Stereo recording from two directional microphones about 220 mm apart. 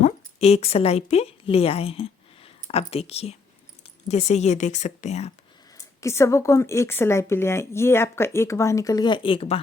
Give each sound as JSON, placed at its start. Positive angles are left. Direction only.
{"t": 0.0, "sound": "a woman's voice", "side_deg": 30}
{"t": 5.7, "sound": "speech", "side_deg": 15}